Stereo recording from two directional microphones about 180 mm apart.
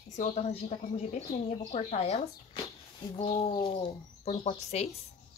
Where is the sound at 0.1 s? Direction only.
40° left (ahead or behind).